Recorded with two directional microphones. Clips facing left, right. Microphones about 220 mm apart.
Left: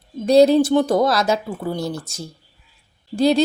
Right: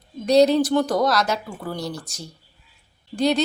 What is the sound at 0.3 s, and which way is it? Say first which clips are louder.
Speech: left 3 dB; 30° left (ahead or behind).